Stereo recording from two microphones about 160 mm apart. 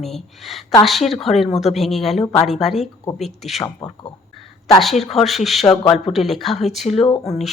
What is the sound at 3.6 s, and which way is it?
Speech, 25° left (ahead or behind).